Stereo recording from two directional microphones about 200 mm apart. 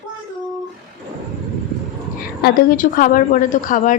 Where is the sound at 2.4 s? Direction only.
45° left (ahead or behind).